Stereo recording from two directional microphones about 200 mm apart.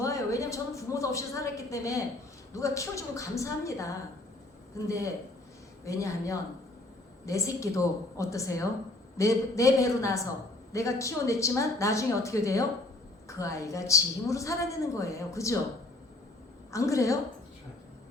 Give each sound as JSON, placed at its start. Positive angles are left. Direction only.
{"t": 0.0, "sound": "a woman's voice", "side_deg": 15}
{"t": 16.7, "sound": "a woman's voice", "side_deg": 15}